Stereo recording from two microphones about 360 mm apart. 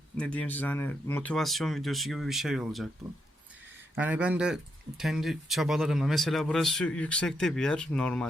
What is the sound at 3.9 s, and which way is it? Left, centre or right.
Speech, centre.